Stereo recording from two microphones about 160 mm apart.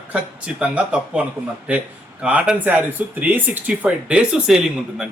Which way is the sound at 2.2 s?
5° right (ahead or behind).